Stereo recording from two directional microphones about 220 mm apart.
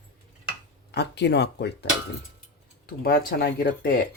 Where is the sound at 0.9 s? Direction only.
50° left (ahead or behind).